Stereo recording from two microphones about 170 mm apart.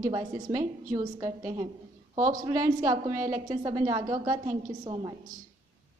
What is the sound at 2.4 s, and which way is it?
A woman's voice, 20° right (ahead or behind).